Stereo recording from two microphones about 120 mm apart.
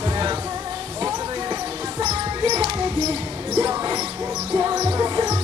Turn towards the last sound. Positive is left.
turn(degrees=-30)  # may be behind; listen again after turning